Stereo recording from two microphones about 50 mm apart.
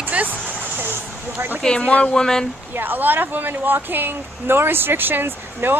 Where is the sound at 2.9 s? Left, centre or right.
Right.